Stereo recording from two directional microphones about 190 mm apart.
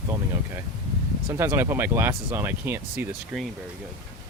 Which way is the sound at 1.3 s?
15° right (ahead or behind).